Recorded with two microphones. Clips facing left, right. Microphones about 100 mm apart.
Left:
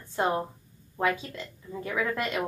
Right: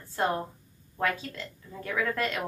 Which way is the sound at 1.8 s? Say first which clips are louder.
Even; 15° left (ahead or behind).